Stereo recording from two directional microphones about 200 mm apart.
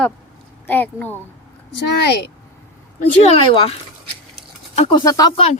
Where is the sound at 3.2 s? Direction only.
30° left (ahead or behind).